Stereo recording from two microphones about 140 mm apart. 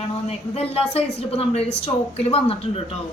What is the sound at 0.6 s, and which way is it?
Speech, 45° left (ahead or behind).